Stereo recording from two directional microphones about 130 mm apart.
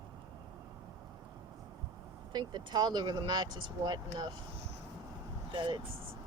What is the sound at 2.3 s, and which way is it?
Speech, 35° right (ahead or behind).